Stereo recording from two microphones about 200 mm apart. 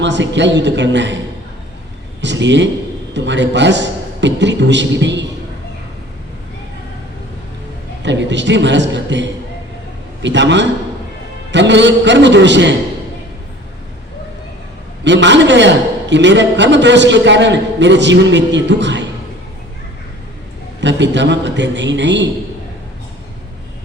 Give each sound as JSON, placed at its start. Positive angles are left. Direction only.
{"t": 0.0, "sound": "a man's voice", "side_deg": -60}
{"t": 2.2, "sound": "a man's voice", "side_deg": -65}
{"t": 8.0, "sound": "a man's voice", "side_deg": -60}
{"t": 15.0, "sound": "a man's voice", "side_deg": -65}
{"t": 20.8, "sound": "a man's voice", "side_deg": -60}